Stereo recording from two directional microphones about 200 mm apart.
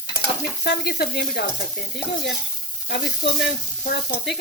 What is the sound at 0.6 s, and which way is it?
Stir, 55° left (ahead or behind).